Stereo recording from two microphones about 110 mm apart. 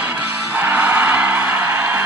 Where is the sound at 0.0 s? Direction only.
15° right (ahead or behind).